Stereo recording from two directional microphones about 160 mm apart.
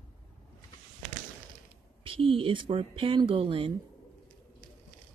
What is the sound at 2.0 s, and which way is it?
Speech, 35° right (ahead or behind).